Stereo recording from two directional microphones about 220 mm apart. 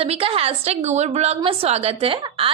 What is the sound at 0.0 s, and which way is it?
A woman's voice, 25° right (ahead or behind).